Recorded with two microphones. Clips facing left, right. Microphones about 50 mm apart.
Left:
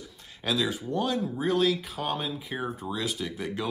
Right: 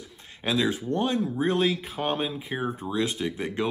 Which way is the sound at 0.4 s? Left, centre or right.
Right.